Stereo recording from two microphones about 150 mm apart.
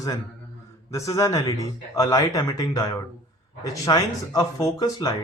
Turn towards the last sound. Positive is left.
turn(degrees=25)  # may be behind; listen again after turning